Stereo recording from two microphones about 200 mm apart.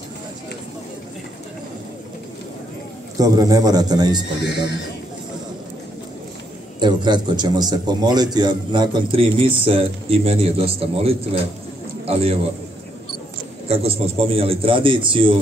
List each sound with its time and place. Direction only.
3.2 s a man's voice: 20° right (ahead or behind)
4.4 s speech: 60° left (ahead or behind)
6.8 s a man's voice: 20° right (ahead or behind)
13.7 s a man's voice: 30° right (ahead or behind)